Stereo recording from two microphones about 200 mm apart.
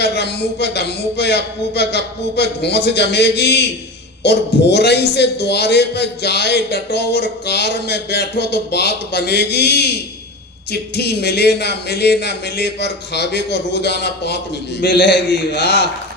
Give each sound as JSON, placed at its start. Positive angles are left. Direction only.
{"t": 0.0, "sound": "a man's voice", "side_deg": 55}